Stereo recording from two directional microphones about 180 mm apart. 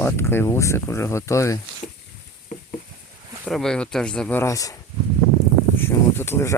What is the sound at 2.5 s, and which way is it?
Patter, 45° left (ahead or behind).